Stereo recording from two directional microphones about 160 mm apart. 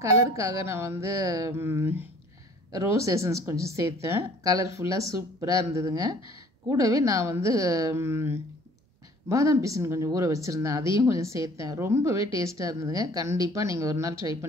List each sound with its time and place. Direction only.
0.0 s a woman's voice: 20° right (ahead or behind)